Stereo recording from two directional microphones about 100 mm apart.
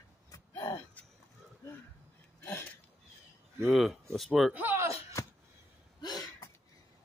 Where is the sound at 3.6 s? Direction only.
Centre (ahead or behind).